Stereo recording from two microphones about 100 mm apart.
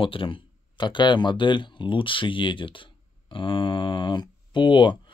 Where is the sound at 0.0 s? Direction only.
60° left (ahead or behind).